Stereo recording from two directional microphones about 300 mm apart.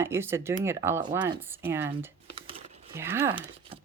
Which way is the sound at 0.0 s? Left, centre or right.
Centre.